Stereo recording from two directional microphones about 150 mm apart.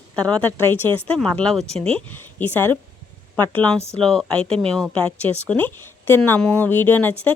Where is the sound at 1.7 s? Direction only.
40° right (ahead or behind).